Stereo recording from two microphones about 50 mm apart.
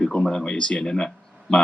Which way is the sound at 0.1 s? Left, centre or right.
Centre.